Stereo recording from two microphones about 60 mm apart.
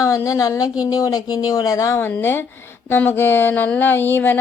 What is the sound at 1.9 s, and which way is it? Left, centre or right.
Speech, left.